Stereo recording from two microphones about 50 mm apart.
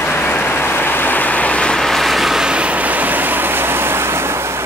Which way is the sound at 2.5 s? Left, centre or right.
Right.